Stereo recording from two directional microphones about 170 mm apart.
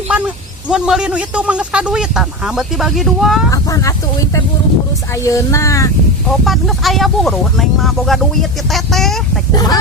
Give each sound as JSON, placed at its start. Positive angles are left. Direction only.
{"t": 0.1, "sound": "a man's voice", "side_deg": -5}
{"t": 3.5, "sound": "speech", "side_deg": 20}
{"t": 6.4, "sound": "a man's voice", "side_deg": 0}
{"t": 9.6, "sound": "speech", "side_deg": 20}